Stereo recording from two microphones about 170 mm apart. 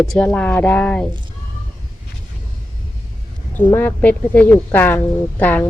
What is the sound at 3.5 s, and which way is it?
Speech, 10° left (ahead or behind).